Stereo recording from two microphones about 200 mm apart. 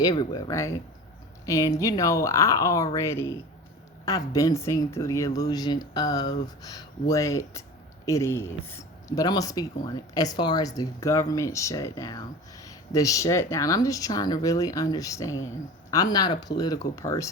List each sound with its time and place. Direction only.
0.0 s speech: 20° left (ahead or behind)